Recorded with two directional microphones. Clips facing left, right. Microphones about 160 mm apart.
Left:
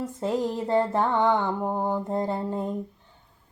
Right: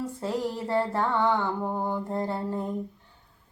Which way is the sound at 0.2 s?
20° left (ahead or behind).